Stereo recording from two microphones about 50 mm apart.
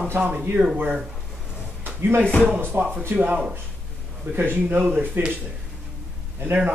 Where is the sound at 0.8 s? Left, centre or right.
Right.